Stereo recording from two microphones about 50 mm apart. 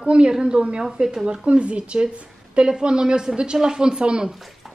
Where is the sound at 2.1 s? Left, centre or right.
Centre.